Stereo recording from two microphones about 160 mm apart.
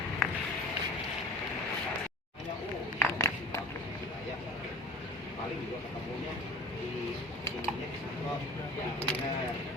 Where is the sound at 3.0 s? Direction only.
20° left (ahead or behind).